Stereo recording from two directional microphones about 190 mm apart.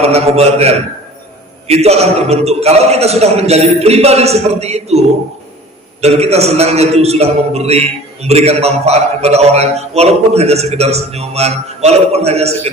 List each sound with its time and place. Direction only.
0.0 s a man's voice: 35° right (ahead or behind)